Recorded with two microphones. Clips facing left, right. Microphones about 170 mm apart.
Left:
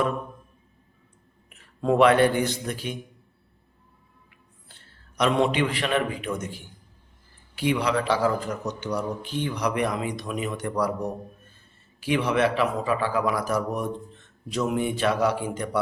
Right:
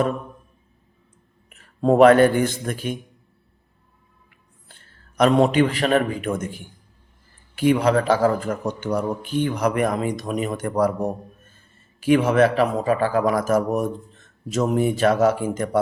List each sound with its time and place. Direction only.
1.5 s a man's voice: 40° right (ahead or behind)
4.7 s a man's voice: 50° right (ahead or behind)